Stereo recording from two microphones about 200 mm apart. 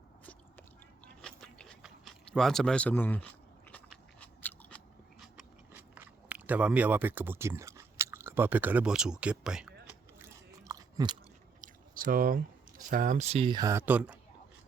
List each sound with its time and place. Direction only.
1.0 s a sound: 5° left (ahead or behind)
5.2 s chewing: 5° right (ahead or behind)
10.2 s biting: 15° right (ahead or behind)
11.6 s speech: 45° right (ahead or behind); by 14.2 s 5° right (ahead or behind)